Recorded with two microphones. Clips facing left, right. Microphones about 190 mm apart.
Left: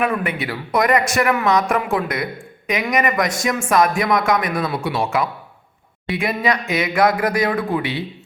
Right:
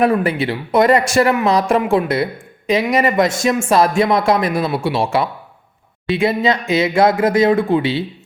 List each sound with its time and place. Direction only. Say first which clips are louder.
0.0 s speech: right 6 dB; 35° right (ahead or behind)